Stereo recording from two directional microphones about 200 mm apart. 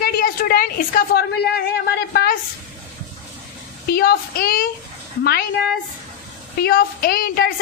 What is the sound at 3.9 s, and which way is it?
A woman's voice, 50° left (ahead or behind).